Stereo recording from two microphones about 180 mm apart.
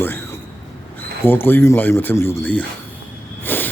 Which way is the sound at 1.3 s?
10° left (ahead or behind).